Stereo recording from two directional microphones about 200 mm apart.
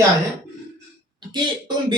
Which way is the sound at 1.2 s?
20° right (ahead or behind).